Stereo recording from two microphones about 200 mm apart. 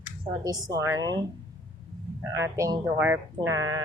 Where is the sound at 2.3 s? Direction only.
15° right (ahead or behind).